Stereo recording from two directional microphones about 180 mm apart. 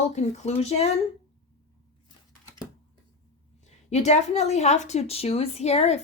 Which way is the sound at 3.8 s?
40° left (ahead or behind).